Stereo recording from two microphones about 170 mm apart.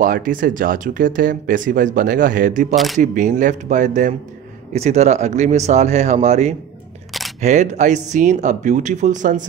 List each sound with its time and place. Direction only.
0.0 s speech: 55° right (ahead or behind)
2.7 s speech: centre (ahead or behind)
3.0 s speech: 50° right (ahead or behind)